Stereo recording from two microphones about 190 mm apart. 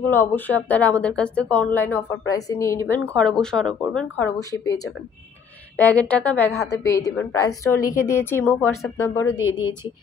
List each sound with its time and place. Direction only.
0.1 s a woman's voice: 10° left (ahead or behind)
3.2 s a woman's voice: 5° left (ahead or behind)
4.4 s speech: 20° left (ahead or behind)
5.8 s a woman's voice: 5° left (ahead or behind)